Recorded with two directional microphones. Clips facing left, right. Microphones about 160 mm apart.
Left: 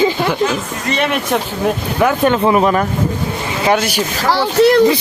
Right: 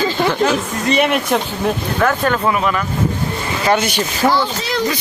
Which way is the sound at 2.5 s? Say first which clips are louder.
Left 6 dB; 35° left (ahead or behind).